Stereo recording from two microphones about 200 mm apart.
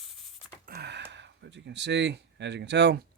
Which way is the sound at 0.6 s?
50° right (ahead or behind).